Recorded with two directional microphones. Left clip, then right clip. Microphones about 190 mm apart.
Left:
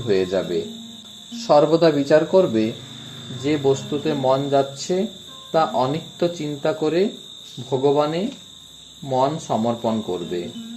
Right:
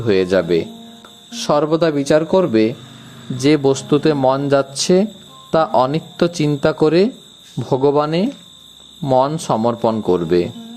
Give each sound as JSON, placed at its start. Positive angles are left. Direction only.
{"t": 0.1, "sound": "speech", "side_deg": -40}